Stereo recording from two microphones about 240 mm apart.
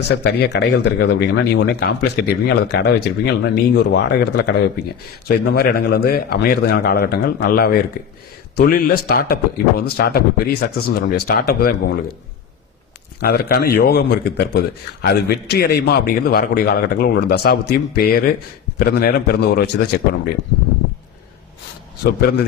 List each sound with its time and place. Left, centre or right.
0.1 s a man's voice: left
13.1 s a man's voice: left
22.0 s a man's voice: left